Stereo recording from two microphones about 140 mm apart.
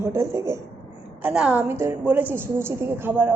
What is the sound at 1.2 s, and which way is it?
A woman's voice, 5° right (ahead or behind).